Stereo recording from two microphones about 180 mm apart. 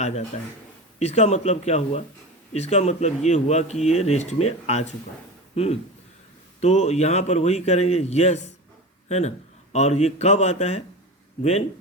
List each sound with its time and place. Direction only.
0.0 s speech: 35° left (ahead or behind)
6.6 s speech: 40° left (ahead or behind)